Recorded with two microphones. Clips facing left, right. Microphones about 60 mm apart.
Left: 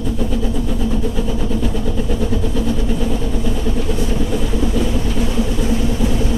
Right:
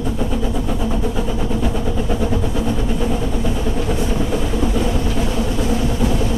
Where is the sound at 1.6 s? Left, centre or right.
Centre.